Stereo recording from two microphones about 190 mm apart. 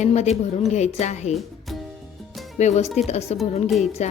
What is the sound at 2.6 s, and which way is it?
A woman's voice, 35° left (ahead or behind).